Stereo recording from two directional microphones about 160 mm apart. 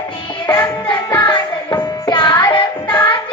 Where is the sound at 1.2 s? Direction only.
25° left (ahead or behind).